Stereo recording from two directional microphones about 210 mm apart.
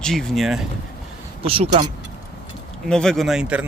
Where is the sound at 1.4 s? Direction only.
25° right (ahead or behind).